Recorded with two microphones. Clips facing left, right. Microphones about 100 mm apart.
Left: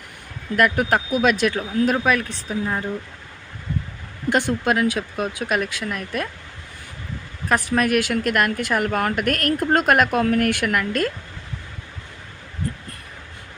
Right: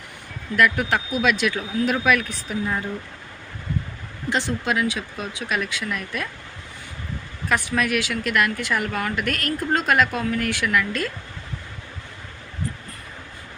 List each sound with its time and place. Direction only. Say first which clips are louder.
0.5 s a woman's voice: left 2 dB; 45° left (ahead or behind); by 2.8 s 25° left (ahead or behind)
4.3 s a woman's voice: left 4 dB; 50° left (ahead or behind)
7.4 s a woman's voice: left 3 dB; 40° left (ahead or behind)